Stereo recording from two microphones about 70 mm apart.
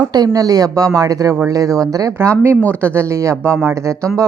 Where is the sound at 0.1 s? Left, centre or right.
Right.